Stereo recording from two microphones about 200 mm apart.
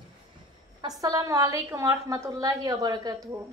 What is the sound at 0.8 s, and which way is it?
A woman's voice, 15° right (ahead or behind).